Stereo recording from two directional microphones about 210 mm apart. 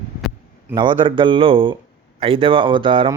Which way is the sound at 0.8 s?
25° right (ahead or behind).